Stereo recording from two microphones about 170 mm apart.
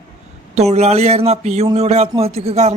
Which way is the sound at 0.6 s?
40° right (ahead or behind).